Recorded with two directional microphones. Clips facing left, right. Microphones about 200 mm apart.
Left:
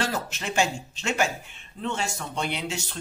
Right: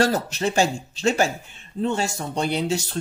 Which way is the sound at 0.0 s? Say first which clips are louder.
Right 8 dB; 40° right (ahead or behind).